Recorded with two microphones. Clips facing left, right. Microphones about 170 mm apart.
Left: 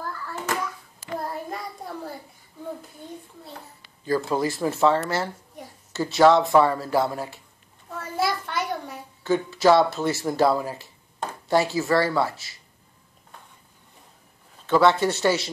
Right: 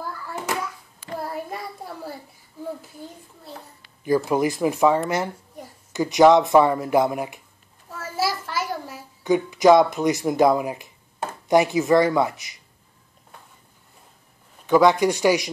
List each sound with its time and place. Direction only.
0.5 s hands: 10° right (ahead or behind)
4.0 s speech: 15° right (ahead or behind)
7.9 s a sound: 5° right (ahead or behind)
9.2 s speech: 15° right (ahead or behind)
14.7 s speech: 15° right (ahead or behind)